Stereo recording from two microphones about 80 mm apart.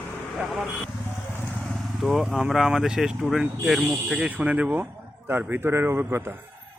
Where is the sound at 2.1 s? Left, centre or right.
Centre; by 6.3 s right.